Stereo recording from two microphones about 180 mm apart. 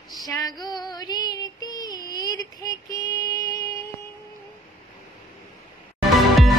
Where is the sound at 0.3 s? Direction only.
20° left (ahead or behind).